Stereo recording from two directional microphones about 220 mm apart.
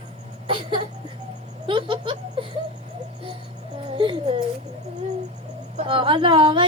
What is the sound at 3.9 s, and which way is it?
Babbling, 25° right (ahead or behind).